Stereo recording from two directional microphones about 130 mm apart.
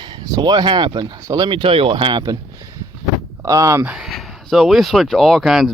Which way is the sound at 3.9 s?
Centre (ahead or behind).